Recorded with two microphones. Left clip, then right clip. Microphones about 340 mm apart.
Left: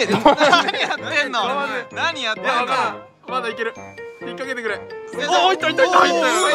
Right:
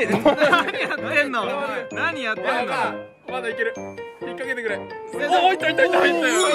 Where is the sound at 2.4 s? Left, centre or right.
Left.